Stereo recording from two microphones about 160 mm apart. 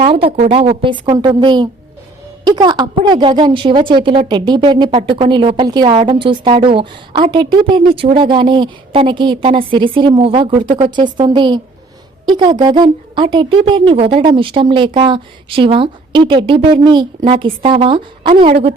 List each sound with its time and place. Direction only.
0.0 s a woman's voice: 35° right (ahead or behind)